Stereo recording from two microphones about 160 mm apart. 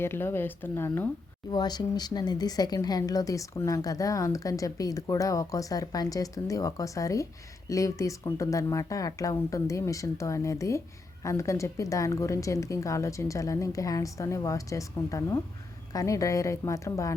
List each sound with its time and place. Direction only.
0.0 s speech: 15° left (ahead or behind)
1.5 s a woman's voice: 25° left (ahead or behind)